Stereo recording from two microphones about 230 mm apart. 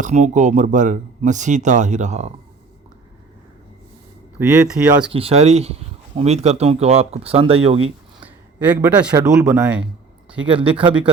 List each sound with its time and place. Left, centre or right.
0.0 s speech: right
4.4 s speech: centre
5.1 s speech: right
8.2 s speech: centre
10.4 s speech: right